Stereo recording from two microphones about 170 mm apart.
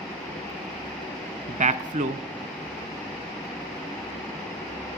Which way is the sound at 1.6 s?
45° right (ahead or behind).